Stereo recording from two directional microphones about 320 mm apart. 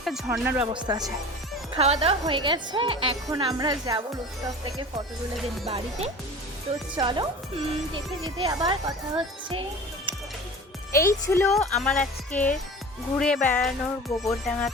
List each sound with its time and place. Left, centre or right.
0.0 s a woman's voice: centre
5.6 s a woman's voice: centre
10.9 s a woman's voice: centre